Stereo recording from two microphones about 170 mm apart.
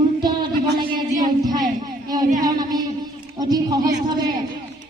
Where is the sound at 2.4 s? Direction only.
25° right (ahead or behind).